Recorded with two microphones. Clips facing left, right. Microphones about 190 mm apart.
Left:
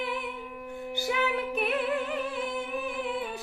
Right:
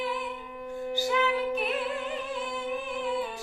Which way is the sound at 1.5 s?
60° left (ahead or behind).